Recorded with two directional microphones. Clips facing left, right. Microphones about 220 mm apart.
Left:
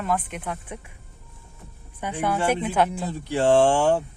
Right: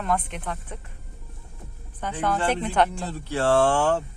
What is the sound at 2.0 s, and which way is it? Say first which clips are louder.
Speech: left 1 dB; 10° left (ahead or behind).